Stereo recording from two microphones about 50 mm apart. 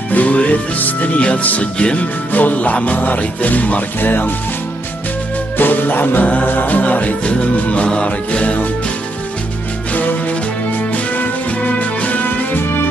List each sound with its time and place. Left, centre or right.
0.1 s music: left
5.6 s music: left
10.9 s music: left